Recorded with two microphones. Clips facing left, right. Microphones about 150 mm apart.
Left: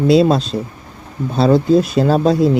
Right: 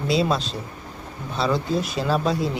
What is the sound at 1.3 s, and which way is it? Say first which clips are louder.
Speech: left 11 dB; 40° left (ahead or behind).